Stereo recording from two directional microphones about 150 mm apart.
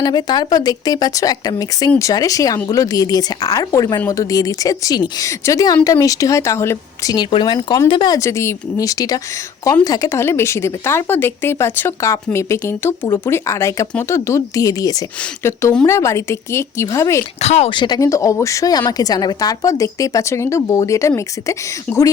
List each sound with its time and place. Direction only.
0.0 s a woman's voice: 30° left (ahead or behind)
17.4 s speech: 45° left (ahead or behind)
17.7 s a woman's voice: 30° left (ahead or behind)
21.9 s speech: 10° left (ahead or behind)